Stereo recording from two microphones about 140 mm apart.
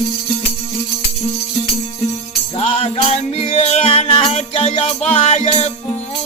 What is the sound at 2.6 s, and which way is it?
Music, 45° left (ahead or behind).